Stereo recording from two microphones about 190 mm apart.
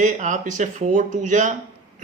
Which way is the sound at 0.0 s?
40° right (ahead or behind).